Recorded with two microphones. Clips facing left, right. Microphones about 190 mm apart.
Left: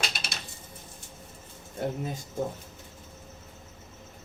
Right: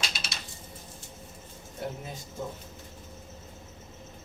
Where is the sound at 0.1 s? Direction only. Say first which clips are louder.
Left 1 dB; 55° left (ahead or behind).